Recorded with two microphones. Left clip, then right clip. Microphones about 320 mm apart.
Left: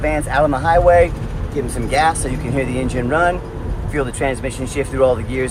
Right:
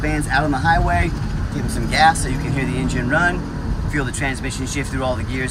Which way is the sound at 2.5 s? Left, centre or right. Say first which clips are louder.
Left 5 dB; centre.